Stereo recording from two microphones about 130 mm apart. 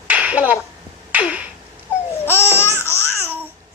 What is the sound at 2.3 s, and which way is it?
Babbling, 20° left (ahead or behind).